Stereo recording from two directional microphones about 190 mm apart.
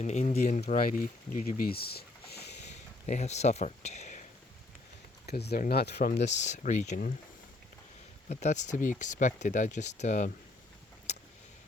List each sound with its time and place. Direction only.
0.0 s speech: 40° left (ahead or behind); by 2.0 s 55° left (ahead or behind)
2.6 s a sound: 35° left (ahead or behind)
5.2 s speech: 60° left (ahead or behind)
6.1 s speech: 40° left (ahead or behind)
8.3 s speech: 40° left (ahead or behind)